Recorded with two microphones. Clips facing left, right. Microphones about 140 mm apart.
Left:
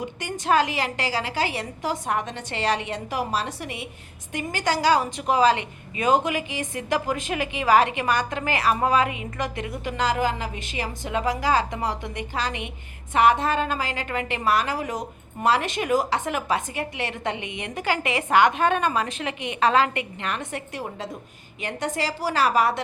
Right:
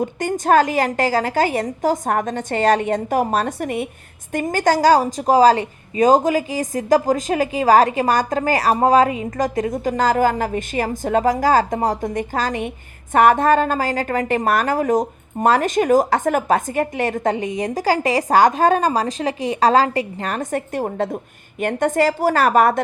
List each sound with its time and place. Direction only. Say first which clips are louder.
0.0 s a woman's voice: right 9 dB; 45° right (ahead or behind)